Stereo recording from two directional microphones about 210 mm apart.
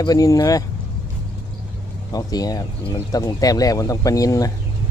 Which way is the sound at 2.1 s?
15° left (ahead or behind).